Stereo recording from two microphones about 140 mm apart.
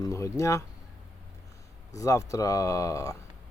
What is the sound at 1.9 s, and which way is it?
Speech, 25° left (ahead or behind).